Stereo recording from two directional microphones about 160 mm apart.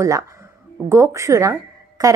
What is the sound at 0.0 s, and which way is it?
A woman's voice, 20° right (ahead or behind).